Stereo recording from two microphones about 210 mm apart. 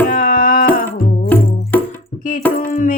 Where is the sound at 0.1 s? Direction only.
40° left (ahead or behind).